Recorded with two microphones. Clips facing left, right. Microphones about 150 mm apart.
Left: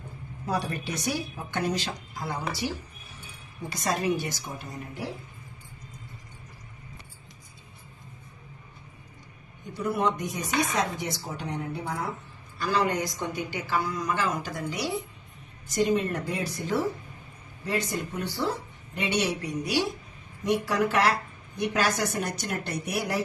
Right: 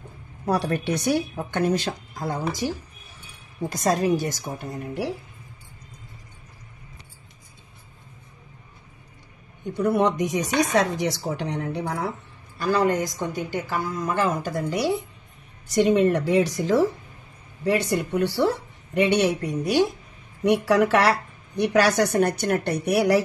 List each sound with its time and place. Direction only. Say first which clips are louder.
0.5 s a woman's voice: right 7 dB; 70° right (ahead or behind); by 4.7 s 50° right (ahead or behind)
9.8 s speech: right 6 dB; 70° right (ahead or behind)
12.5 s a woman's voice: right 5 dB; 55° right (ahead or behind)
15.7 s speech: right 7 dB; 70° right (ahead or behind); by 16.8 s 90° right
17.6 s speech: right 7 dB; 70° right (ahead or behind)
18.9 s a woman's voice: right 8 dB; 60° right (ahead or behind)
20.4 s speech: right 6 dB; 65° right (ahead or behind)